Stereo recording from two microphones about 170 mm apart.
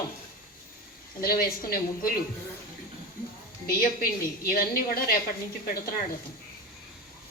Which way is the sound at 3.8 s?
60° left (ahead or behind).